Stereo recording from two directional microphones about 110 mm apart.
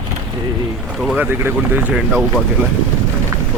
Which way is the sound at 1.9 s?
Centre (ahead or behind).